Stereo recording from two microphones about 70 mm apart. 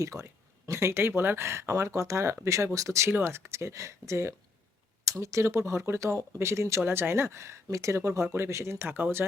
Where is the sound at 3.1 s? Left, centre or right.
Right.